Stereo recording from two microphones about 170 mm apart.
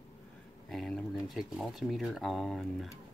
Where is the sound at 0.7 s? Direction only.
Centre (ahead or behind).